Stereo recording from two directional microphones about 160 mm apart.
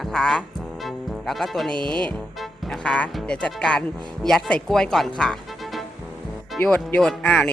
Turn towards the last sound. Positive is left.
turn(degrees=5)  # may be behind; listen again after turning